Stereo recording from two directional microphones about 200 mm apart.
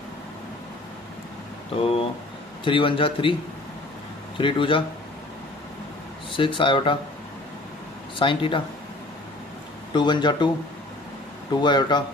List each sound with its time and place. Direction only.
1.8 s a man's voice: 30° left (ahead or behind)
4.4 s a man's voice: 25° left (ahead or behind)
6.3 s a man's voice: 25° left (ahead or behind)
8.2 s a man's voice: 25° left (ahead or behind)
9.9 s a man's voice: 20° left (ahead or behind)
11.6 s a man's voice: 20° left (ahead or behind)